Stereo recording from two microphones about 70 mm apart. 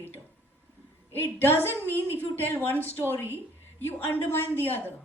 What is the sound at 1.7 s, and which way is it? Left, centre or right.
Speech, right.